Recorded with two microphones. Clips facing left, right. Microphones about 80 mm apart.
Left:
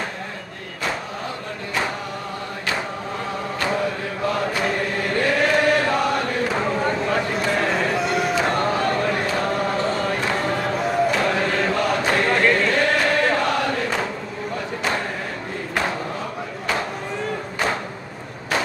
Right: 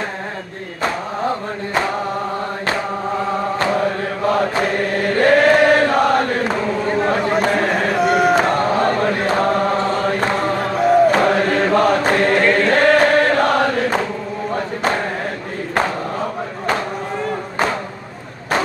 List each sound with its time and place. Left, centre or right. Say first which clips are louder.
4.3 s chant: right 6 dB; right
7.0 s a sound: right 6 dB; right
8.5 s chant: right 4 dB; right